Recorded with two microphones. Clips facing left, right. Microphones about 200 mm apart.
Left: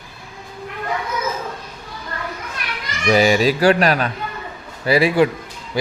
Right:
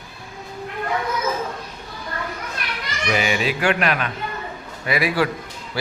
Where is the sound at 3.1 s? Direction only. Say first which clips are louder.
Left 7 dB; 35° left (ahead or behind).